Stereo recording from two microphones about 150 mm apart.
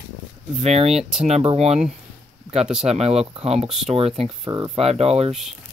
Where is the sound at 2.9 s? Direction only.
45° right (ahead or behind).